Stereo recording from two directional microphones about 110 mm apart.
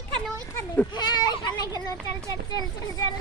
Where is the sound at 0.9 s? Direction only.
40° left (ahead or behind).